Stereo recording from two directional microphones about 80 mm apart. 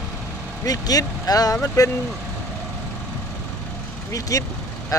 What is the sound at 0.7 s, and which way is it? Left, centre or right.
Speech, left.